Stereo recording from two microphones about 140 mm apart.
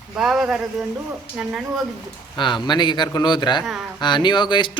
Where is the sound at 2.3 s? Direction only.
35° left (ahead or behind).